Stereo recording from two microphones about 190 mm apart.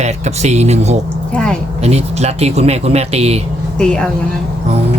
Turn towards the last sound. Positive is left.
turn(degrees=5)  # may be behind; listen again after turning